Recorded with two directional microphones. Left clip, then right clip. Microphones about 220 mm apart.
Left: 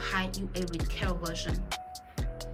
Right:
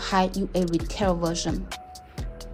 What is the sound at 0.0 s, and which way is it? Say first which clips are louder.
A woman's voice: right 9 dB; 20° right (ahead or behind).